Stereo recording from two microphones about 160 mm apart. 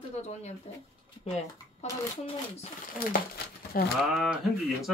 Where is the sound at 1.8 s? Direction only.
40° left (ahead or behind).